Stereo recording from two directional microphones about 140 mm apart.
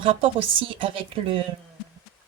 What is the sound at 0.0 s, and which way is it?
Speech, 40° right (ahead or behind).